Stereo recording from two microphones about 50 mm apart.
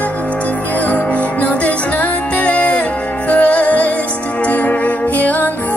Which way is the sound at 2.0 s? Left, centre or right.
Left.